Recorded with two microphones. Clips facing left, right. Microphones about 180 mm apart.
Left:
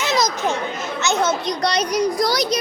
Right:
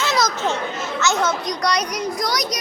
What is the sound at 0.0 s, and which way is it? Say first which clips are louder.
Chatter: left 1 dB; 15° left (ahead or behind).